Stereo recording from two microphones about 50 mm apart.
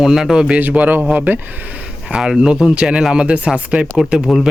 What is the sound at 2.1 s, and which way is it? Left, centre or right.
Speech, centre.